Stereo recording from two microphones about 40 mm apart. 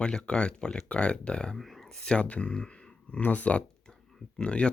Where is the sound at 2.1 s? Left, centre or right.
Left.